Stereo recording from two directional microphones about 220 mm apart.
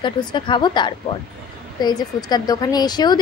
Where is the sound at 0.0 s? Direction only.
20° left (ahead or behind).